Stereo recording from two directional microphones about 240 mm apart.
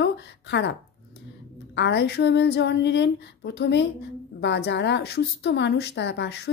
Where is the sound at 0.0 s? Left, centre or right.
Left.